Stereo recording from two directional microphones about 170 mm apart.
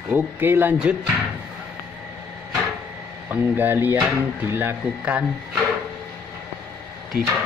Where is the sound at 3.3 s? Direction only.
10° right (ahead or behind).